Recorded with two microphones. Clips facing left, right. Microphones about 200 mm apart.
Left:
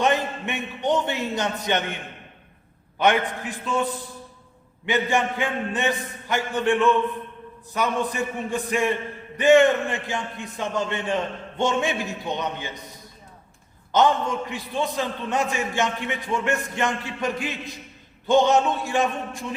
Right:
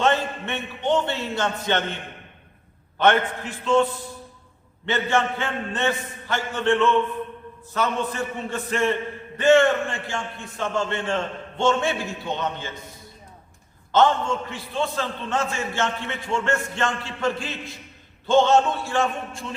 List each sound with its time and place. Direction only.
0.0 s a man's voice: 15° left (ahead or behind)
3.0 s a man's voice: 15° left (ahead or behind)
4.9 s a man's voice: 15° left (ahead or behind)
13.9 s a man's voice: 15° left (ahead or behind)